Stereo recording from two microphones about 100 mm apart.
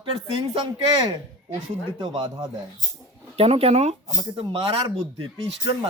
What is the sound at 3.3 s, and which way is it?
Speech, 80° right.